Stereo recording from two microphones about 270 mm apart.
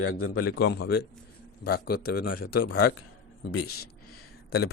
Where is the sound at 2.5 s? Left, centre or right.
Left.